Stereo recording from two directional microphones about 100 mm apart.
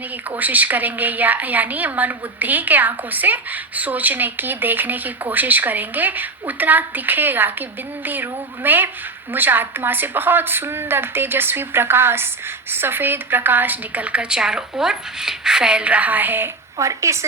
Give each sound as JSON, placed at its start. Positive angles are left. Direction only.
{"t": 0.3, "sound": "a woman's voice", "side_deg": -15}
{"t": 16.7, "sound": "a woman's voice", "side_deg": -30}